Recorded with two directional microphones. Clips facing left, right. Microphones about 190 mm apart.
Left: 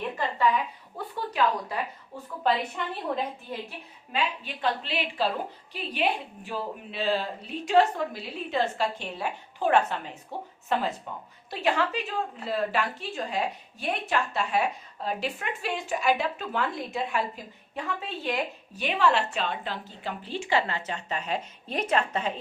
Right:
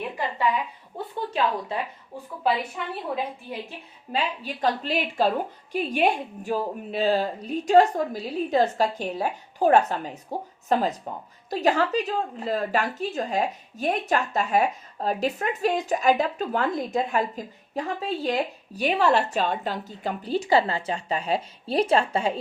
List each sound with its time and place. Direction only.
0.0 s a sound: 10° right (ahead or behind)
2.4 s a woman's voice: 5° right (ahead or behind)
4.1 s a woman's voice: 40° right (ahead or behind)